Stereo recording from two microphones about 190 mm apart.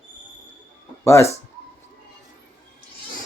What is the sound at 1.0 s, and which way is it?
Speech, 15° left (ahead or behind).